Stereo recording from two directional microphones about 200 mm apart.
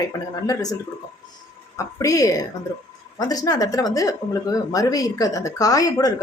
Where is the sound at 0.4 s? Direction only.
20° left (ahead or behind).